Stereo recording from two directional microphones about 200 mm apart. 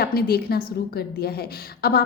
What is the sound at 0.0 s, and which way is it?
A woman's voice, 50° left (ahead or behind).